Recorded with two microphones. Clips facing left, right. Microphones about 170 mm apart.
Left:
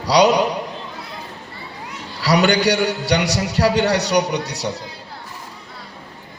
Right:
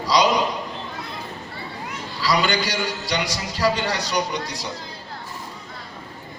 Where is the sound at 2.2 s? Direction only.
70° left (ahead or behind).